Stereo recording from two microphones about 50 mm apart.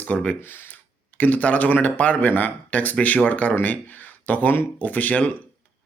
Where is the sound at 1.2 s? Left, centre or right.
Left.